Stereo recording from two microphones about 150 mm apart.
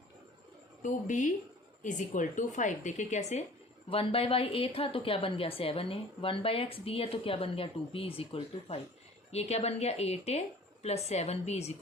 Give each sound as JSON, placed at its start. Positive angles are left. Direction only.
{"t": 0.8, "sound": "a woman's voice", "side_deg": 60}